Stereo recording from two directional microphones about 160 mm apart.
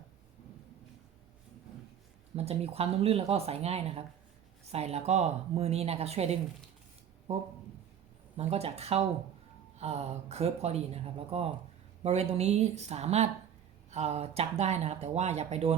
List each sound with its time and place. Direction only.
2.3 s speech: 40° right (ahead or behind)